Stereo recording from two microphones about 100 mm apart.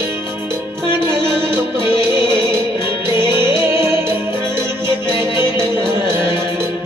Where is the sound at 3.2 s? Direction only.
50° left (ahead or behind).